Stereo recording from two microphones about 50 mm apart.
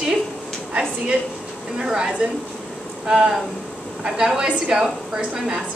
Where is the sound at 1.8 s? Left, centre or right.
Centre.